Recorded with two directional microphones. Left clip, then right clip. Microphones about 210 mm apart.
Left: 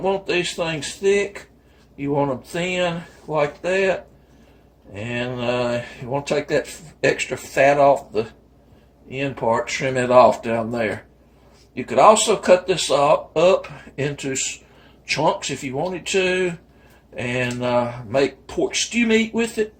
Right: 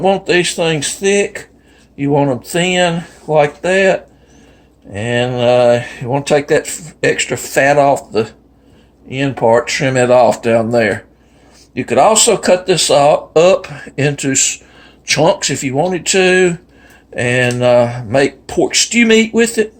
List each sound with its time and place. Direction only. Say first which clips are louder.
0.0 s speech: right 9 dB; 50° right (ahead or behind)
5.0 s speech: right 12 dB; 50° right (ahead or behind)